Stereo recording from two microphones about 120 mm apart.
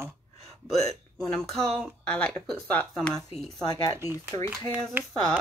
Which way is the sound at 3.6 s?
30° left (ahead or behind).